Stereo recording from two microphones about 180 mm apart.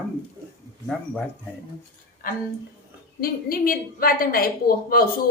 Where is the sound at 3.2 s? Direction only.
55° left (ahead or behind).